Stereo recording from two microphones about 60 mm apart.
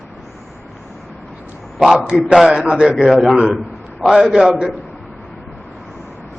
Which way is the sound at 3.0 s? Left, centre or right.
Centre.